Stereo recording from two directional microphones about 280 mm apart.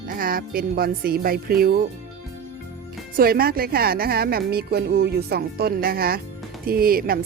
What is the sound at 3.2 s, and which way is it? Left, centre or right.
A woman's voice, right.